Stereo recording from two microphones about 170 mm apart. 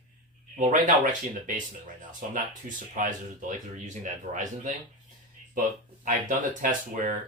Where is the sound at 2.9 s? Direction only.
50° right (ahead or behind).